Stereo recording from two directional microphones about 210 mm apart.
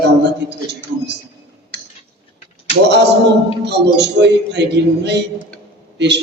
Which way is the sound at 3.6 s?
55° right (ahead or behind).